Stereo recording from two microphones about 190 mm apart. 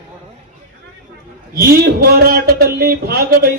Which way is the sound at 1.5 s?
50° right (ahead or behind).